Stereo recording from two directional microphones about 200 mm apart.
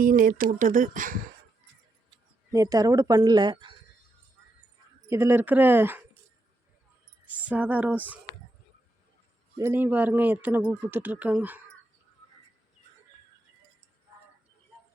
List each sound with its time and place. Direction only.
0.0 s speech: 45° right (ahead or behind)
2.0 s speech: 15° right (ahead or behind)
5.0 s speech: 15° right (ahead or behind)
7.4 s speech: 10° right (ahead or behind)
9.6 s speech: 10° right (ahead or behind)